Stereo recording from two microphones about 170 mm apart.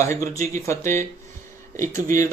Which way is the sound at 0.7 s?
15° left (ahead or behind).